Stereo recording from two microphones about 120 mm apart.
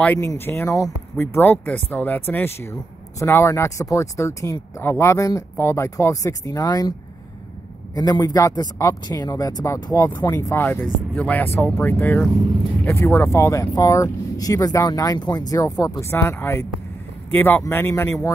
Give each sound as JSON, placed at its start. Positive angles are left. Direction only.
{"t": 0.0, "sound": "speech", "side_deg": 15}
{"t": 7.9, "sound": "a man's voice", "side_deg": 30}